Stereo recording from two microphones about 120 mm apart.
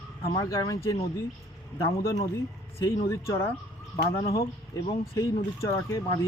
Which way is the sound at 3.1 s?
20° left (ahead or behind).